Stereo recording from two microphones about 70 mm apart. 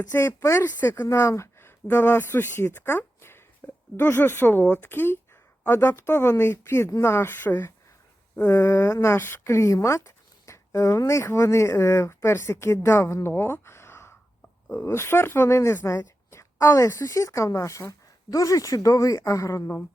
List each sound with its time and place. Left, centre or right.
0.1 s speech: left
1.0 s speech: left
3.2 s a sound: left
3.9 s speech: left
8.4 s speech: left
9.5 s speech: left